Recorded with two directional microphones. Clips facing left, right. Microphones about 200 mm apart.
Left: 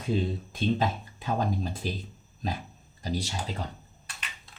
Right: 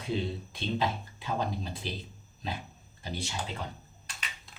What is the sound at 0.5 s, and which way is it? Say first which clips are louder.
Speech: left 4 dB; 45° left (ahead or behind).